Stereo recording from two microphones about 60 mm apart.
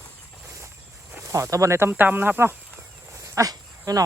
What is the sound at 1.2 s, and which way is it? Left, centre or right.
Speech, right.